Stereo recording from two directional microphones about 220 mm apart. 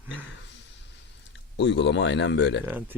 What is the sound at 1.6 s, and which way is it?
A man's voice, 55° left (ahead or behind).